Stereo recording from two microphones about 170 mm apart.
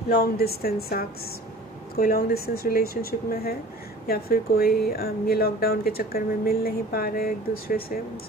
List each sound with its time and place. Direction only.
0.1 s speech: 65° left (ahead or behind)